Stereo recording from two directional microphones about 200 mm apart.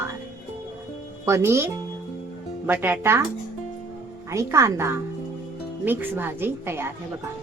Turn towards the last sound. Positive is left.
turn(degrees=-10)  # may be behind; listen again after turning